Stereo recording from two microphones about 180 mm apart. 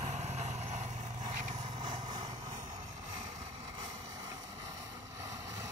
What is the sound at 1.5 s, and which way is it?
Vehicle, 25° right (ahead or behind).